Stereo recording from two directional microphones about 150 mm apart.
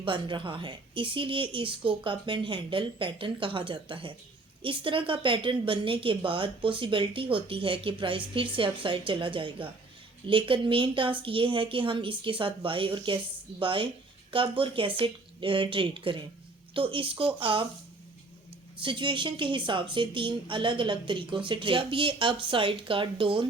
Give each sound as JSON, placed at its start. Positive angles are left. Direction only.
{"t": 0.0, "sound": "a woman's voice", "side_deg": -35}
{"t": 18.8, "sound": "a woman's voice", "side_deg": -35}